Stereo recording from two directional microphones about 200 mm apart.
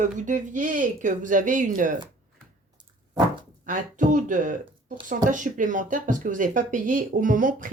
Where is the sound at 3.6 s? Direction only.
40° right (ahead or behind).